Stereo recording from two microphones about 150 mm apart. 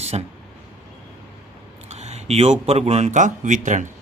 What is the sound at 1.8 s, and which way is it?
Speech, 45° right (ahead or behind).